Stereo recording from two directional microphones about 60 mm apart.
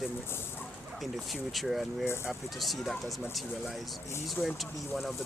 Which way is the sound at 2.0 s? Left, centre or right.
Left.